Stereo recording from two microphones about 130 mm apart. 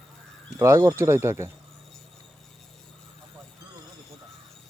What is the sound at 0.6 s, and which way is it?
Speech, 20° right (ahead or behind).